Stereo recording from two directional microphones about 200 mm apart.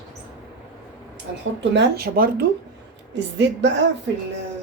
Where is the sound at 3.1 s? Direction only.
60° right (ahead or behind).